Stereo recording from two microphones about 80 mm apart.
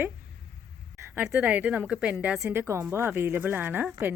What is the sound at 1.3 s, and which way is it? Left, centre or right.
A woman's voice, centre.